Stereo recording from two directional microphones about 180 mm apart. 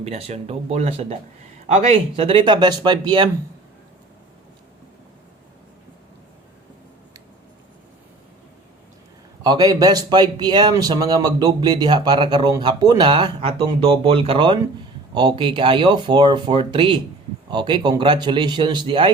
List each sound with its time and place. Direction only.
0.0 s speech: 35° right (ahead or behind)
9.4 s speech: 20° right (ahead or behind)